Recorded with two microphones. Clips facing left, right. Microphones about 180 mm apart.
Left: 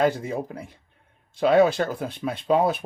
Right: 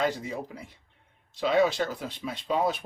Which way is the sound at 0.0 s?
55° left (ahead or behind).